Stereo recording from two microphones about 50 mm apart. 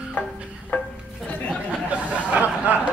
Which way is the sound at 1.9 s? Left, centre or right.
Right.